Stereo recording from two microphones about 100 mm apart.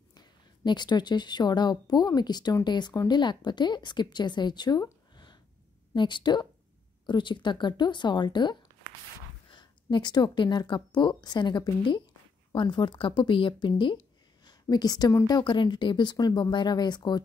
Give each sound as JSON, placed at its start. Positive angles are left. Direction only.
{"t": 0.1, "sound": "a woman's voice", "side_deg": 45}